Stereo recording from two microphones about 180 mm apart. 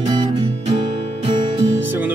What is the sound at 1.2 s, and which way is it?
Music, 30° right (ahead or behind).